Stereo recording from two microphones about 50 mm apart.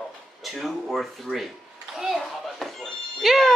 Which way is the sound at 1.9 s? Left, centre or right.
Centre.